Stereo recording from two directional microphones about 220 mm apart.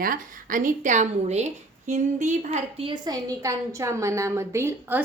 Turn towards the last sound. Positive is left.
turn(degrees=-10)  # may be behind; listen again after turning